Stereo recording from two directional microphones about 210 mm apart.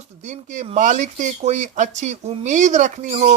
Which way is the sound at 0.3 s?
35° right (ahead or behind).